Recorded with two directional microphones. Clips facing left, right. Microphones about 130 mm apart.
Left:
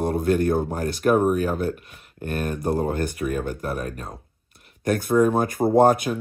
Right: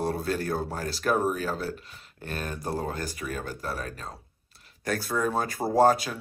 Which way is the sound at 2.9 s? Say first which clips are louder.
Left 8 dB; 60° left (ahead or behind).